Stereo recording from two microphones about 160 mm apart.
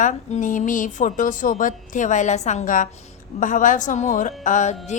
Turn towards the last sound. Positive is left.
turn(degrees=50)  # may be behind; listen again after turning